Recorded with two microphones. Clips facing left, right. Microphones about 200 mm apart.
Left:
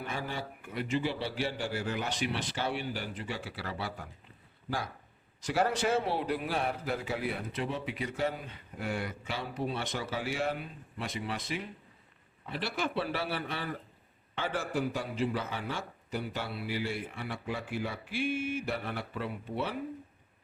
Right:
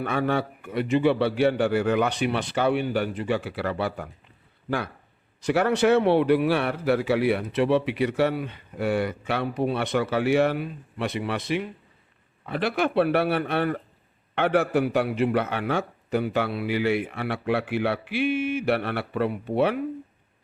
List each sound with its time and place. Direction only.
0.0 s a man's voice: 65° right (ahead or behind)
5.4 s a man's voice: 65° right (ahead or behind)